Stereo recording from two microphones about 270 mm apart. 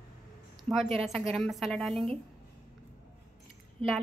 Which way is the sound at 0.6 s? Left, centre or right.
Centre.